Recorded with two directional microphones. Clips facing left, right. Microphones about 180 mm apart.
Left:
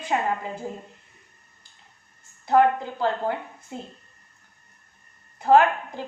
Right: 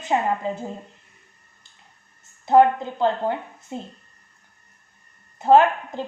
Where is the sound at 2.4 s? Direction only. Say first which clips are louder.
Right 3 dB; 20° right (ahead or behind).